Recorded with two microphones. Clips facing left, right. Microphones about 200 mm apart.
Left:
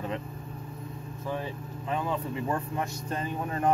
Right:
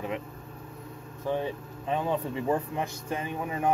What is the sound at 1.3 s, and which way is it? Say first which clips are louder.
Speech: right 4 dB; 20° right (ahead or behind).